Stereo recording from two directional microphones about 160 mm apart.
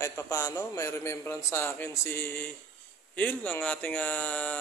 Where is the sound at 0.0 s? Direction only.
15° left (ahead or behind).